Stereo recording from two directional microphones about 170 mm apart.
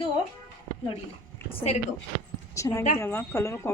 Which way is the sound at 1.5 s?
45° left (ahead or behind).